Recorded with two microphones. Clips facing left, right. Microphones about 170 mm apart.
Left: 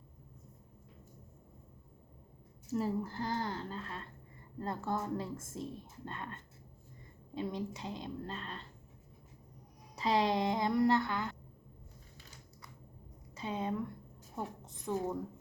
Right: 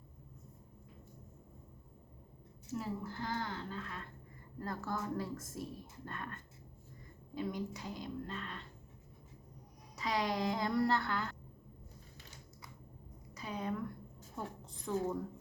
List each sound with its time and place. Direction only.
2.7 s speech: 35° left (ahead or behind)
9.9 s speech: 30° left (ahead or behind)
13.3 s a woman's voice: 25° left (ahead or behind)